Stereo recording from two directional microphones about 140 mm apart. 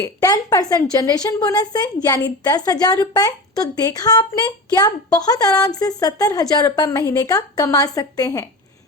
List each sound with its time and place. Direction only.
0.0 s a woman's voice: 25° left (ahead or behind)